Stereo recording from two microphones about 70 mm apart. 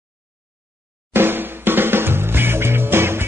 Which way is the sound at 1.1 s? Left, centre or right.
Right.